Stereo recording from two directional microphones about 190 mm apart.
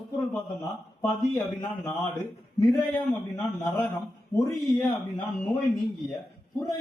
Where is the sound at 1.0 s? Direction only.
15° left (ahead or behind).